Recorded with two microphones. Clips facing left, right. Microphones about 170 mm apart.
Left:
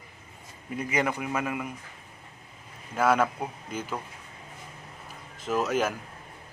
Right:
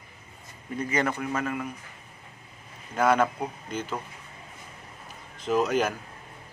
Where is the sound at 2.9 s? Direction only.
5° left (ahead or behind).